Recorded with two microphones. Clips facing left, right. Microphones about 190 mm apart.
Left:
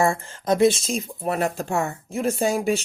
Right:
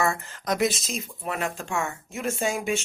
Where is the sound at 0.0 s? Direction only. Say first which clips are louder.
Left 5 dB; 30° left (ahead or behind).